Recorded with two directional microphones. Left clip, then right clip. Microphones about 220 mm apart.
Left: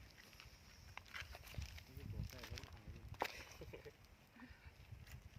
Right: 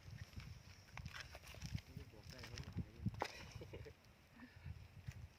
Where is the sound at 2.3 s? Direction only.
20° left (ahead or behind).